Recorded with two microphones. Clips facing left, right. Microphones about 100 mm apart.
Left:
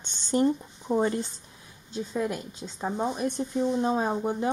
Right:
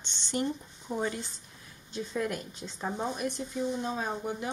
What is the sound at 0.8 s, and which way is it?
Speech, 40° left (ahead or behind).